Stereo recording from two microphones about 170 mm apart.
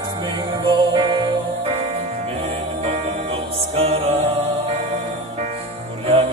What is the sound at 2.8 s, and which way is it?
Music, 35° right (ahead or behind).